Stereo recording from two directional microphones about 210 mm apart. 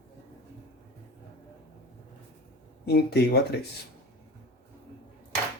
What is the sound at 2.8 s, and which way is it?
Speech, 50° left (ahead or behind).